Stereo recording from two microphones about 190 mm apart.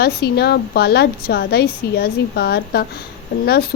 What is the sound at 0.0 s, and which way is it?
A woman's voice, 55° left (ahead or behind).